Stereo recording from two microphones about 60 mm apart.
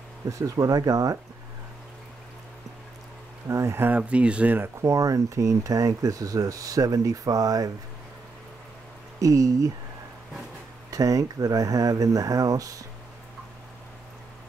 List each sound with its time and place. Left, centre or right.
0.3 s speech: right
3.4 s speech: right
3.8 s speech: right
4.7 s speech: right
9.2 s speech: right
10.9 s speech: right